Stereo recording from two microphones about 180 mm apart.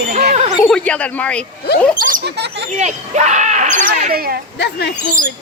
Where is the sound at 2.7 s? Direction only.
40° right (ahead or behind); by 4.4 s 55° right (ahead or behind).